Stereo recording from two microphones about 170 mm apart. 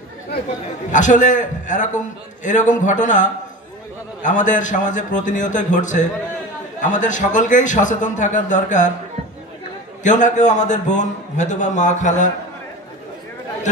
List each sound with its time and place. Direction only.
0.9 s a man's voice: 45° left (ahead or behind)
10.0 s a man's voice: 45° left (ahead or behind)